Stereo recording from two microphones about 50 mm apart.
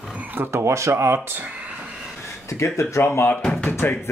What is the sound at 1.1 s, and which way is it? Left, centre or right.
Speech, right.